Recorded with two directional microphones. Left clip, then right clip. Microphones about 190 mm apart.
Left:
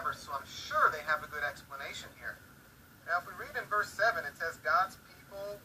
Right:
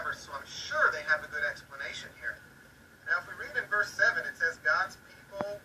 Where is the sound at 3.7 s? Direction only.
25° right (ahead or behind).